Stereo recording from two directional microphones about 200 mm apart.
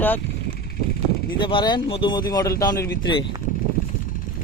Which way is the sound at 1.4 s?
25° left (ahead or behind).